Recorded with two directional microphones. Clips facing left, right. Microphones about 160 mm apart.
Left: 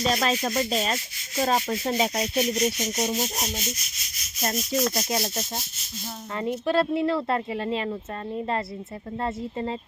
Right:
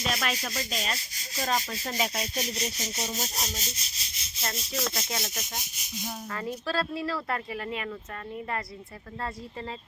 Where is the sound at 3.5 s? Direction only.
35° right (ahead or behind).